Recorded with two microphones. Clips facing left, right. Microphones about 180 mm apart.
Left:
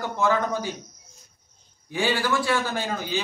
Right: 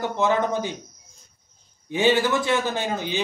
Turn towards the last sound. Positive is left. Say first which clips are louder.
# right 2 dB
turn(degrees=-20)  # may be behind; listen again after turning